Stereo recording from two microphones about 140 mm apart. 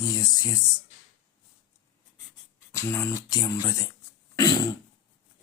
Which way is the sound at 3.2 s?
30° left (ahead or behind).